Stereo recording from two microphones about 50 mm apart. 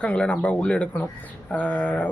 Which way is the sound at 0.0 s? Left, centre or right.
Left.